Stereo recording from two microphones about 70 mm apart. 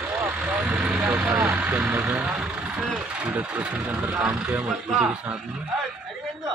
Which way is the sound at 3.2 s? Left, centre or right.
Right.